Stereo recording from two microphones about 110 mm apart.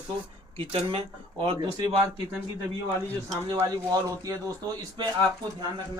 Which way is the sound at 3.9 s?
35° right (ahead or behind).